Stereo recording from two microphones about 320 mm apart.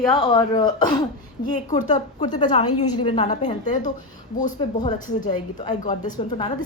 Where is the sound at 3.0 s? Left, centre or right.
Centre.